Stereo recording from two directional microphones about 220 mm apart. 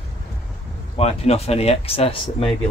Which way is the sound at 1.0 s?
25° left (ahead or behind).